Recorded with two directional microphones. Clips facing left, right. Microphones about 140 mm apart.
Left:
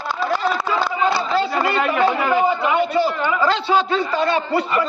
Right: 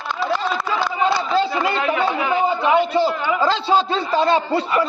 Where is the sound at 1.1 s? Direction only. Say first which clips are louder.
Right 1 dB; 25° right (ahead or behind).